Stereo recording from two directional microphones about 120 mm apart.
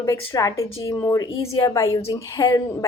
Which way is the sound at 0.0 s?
25° left (ahead or behind).